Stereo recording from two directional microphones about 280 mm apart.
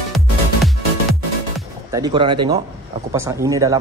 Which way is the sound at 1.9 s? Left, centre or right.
Centre.